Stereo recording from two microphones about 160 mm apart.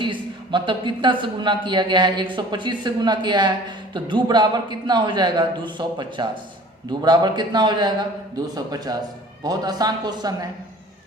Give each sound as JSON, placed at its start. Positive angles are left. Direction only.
{"t": 0.0, "sound": "speech", "side_deg": -30}